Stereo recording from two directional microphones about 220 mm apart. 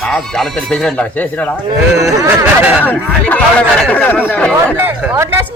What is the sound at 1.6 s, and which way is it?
Speech, 15° right (ahead or behind).